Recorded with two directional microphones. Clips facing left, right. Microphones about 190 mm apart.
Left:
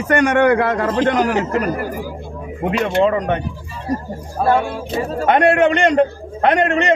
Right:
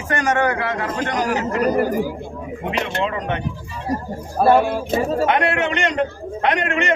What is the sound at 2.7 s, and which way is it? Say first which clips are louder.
Speech: left 7 dB; 45° left (ahead or behind).